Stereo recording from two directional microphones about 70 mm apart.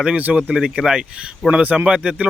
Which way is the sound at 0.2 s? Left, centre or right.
Right.